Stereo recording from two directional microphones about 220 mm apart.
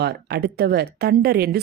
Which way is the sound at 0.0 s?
45° right (ahead or behind).